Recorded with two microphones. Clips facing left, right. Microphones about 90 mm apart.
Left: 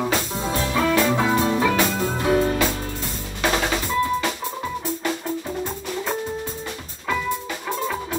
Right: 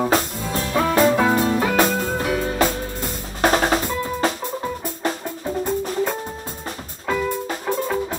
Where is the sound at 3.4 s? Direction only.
40° right (ahead or behind).